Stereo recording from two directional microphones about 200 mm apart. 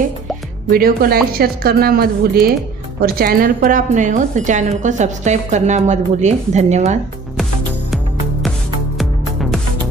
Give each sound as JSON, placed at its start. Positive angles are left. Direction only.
{"t": 0.7, "sound": "speech", "side_deg": -50}
{"t": 7.9, "sound": "music", "side_deg": 0}